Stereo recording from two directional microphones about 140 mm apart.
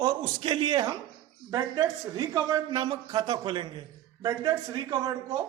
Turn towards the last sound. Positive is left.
turn(degrees=-25)  # may be behind; listen again after turning